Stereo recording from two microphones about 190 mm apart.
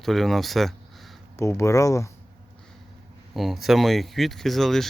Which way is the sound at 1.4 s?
15° left (ahead or behind).